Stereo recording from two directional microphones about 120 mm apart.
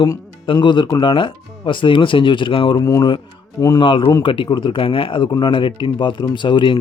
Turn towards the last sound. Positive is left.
turn(degrees=40)  # may be behind; listen again after turning